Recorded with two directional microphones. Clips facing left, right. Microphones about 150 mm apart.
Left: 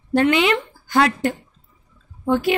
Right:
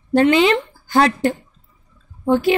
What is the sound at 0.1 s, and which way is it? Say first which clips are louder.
A woman's voice: right 3 dB; 30° right (ahead or behind).